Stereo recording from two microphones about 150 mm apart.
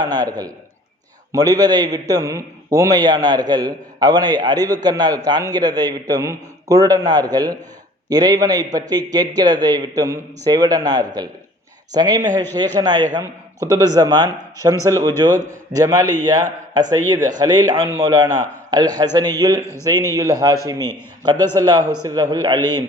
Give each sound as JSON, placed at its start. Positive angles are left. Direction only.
{"t": 0.0, "sound": "a man's voice", "side_deg": -25}